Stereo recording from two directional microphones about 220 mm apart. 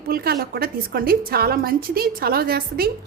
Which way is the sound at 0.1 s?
45° right (ahead or behind).